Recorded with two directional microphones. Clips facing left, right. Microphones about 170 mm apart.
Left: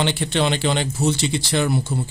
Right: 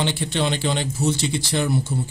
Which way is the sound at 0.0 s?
75° left (ahead or behind).